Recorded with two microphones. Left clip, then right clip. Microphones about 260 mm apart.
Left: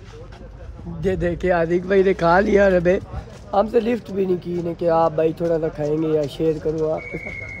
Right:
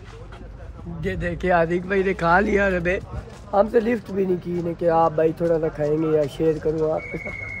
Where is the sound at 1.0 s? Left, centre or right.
Centre.